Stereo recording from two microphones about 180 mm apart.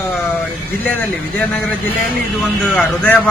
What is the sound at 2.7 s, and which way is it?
Speech, 5° left (ahead or behind).